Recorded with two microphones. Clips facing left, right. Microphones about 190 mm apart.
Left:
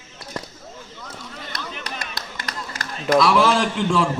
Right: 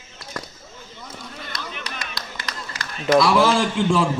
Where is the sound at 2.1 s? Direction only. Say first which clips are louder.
Left 1 dB; 50° left (ahead or behind).